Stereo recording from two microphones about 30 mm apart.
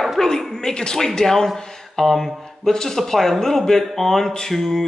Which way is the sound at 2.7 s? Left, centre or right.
Centre.